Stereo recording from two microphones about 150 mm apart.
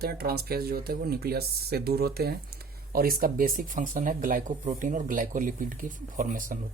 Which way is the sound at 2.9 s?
75° right (ahead or behind).